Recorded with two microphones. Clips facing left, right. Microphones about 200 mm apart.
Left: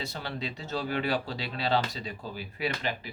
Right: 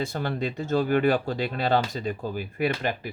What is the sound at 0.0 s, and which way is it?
Speech, 50° right (ahead or behind).